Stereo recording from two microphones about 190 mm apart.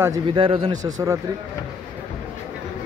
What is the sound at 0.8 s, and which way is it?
Speech, 15° right (ahead or behind).